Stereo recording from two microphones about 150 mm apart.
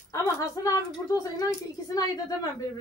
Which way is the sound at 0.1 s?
20° left (ahead or behind).